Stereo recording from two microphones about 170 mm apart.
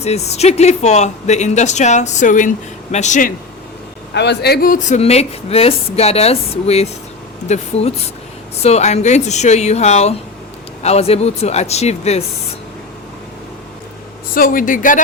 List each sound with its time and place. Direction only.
0.0 s speech: 40° left (ahead or behind)
4.1 s speech: 85° left; by 12.2 s 40° left (ahead or behind)
14.3 s speech: 55° left (ahead or behind)